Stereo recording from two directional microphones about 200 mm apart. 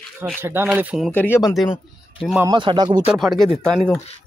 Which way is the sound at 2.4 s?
20° right (ahead or behind).